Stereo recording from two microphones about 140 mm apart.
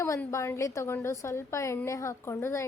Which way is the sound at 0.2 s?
20° left (ahead or behind).